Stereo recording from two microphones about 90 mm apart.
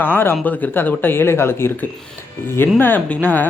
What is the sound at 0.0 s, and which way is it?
Speech, 25° left (ahead or behind).